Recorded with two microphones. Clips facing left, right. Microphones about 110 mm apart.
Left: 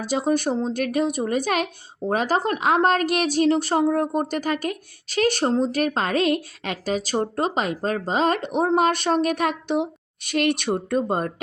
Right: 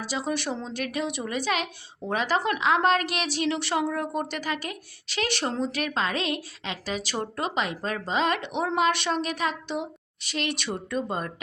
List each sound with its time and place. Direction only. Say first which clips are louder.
0.0 s a woman's voice: left 7 dB; 50° left (ahead or behind)